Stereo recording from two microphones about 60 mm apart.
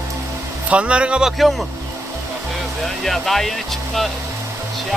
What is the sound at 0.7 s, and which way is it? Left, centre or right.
Speech, centre.